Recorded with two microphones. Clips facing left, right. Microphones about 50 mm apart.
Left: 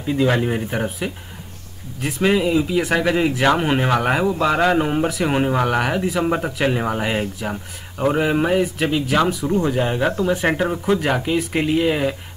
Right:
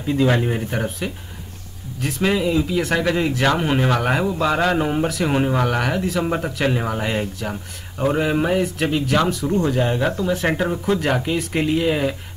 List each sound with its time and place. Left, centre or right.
0.0 s speech: centre